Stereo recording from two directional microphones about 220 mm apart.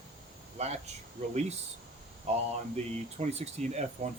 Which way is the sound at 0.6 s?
30° right (ahead or behind).